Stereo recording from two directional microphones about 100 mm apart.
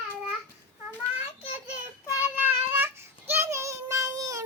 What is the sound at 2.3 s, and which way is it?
Child singing, 20° right (ahead or behind).